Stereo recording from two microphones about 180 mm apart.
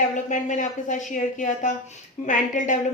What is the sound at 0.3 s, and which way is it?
A woman's voice, 45° left (ahead or behind).